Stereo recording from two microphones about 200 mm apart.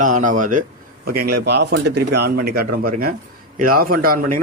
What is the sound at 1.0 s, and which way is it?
Speech, 50° right (ahead or behind).